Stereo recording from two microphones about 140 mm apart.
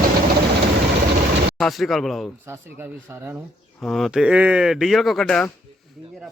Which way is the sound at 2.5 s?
15° right (ahead or behind).